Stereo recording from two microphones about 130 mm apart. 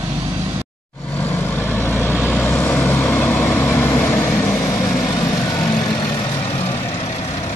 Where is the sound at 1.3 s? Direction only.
15° left (ahead or behind).